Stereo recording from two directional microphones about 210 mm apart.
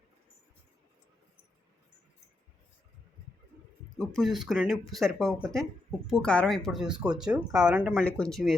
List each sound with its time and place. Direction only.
3.9 s speech: centre (ahead or behind)